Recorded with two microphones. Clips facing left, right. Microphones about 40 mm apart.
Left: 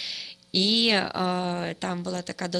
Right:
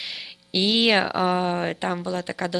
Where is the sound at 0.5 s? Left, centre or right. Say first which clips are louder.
Right 3 dB; right.